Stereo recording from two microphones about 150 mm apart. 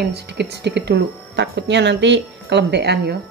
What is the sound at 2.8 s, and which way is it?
Speech, 90° right.